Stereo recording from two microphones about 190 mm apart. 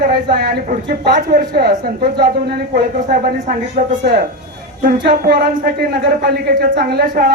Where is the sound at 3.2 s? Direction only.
45° right (ahead or behind).